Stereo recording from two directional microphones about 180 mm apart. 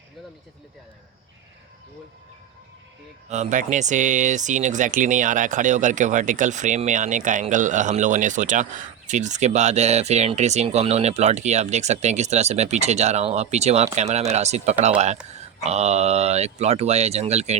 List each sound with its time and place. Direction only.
3.2 s speech: 40° right (ahead or behind)